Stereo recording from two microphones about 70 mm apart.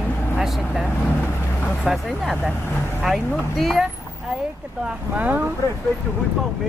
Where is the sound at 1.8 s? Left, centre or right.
Centre.